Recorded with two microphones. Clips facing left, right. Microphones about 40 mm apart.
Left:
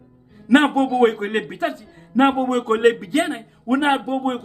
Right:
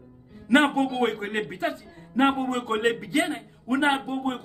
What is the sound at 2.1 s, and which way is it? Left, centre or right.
Speech, left.